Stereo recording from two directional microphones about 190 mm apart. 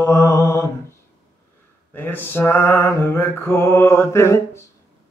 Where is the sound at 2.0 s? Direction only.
10° left (ahead or behind).